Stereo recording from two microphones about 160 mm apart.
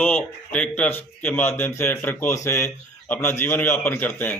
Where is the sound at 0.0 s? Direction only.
10° left (ahead or behind).